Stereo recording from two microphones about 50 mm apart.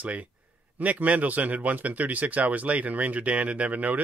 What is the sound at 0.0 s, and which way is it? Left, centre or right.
Speech, right.